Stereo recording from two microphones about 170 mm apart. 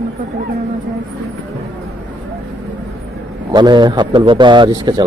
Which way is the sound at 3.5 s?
25° right (ahead or behind).